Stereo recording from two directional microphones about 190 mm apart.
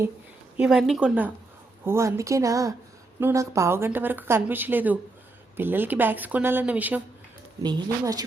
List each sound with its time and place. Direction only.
0.5 s speech: 5° right (ahead or behind)
7.6 s speech: 20° right (ahead or behind)